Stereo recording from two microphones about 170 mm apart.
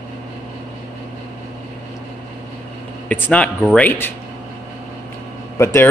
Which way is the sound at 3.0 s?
10° left (ahead or behind).